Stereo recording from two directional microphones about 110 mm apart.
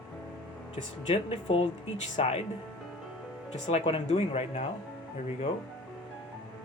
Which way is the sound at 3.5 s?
70° left (ahead or behind).